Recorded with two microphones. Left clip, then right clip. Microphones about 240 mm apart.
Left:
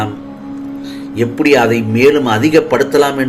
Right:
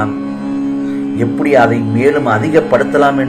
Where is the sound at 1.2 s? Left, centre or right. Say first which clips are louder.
Even; left.